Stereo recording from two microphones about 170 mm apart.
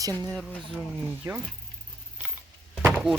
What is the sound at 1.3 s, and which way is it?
Speech, 15° right (ahead or behind).